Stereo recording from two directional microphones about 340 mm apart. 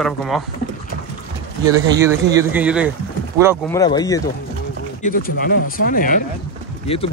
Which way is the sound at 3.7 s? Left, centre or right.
Centre.